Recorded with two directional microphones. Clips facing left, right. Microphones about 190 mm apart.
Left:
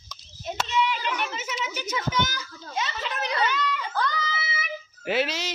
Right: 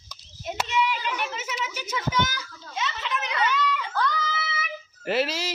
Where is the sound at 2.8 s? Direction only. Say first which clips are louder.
Even; 40° left (ahead or behind).